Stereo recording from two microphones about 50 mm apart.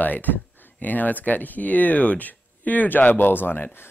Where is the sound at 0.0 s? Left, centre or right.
Left.